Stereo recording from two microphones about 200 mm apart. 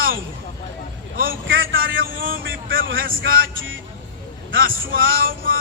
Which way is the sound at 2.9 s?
45° right (ahead or behind).